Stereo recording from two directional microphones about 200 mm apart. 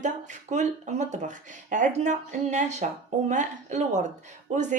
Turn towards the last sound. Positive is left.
turn(degrees=-40)  # may be behind; listen again after turning